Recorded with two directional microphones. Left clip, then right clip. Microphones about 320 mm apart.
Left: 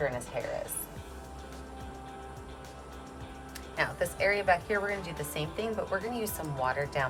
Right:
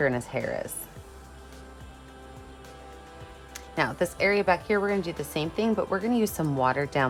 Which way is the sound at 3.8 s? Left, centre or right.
Centre.